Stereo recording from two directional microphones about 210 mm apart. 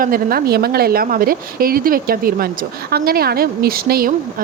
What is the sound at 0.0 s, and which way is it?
Speech, 45° right (ahead or behind).